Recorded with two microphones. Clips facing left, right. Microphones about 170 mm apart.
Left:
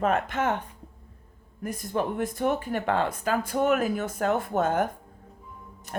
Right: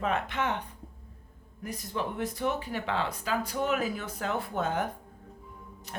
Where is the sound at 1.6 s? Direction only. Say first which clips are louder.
Left 6 dB; 50° left (ahead or behind).